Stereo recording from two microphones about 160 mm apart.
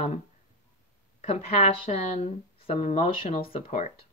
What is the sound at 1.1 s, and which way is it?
Speech, 40° left (ahead or behind).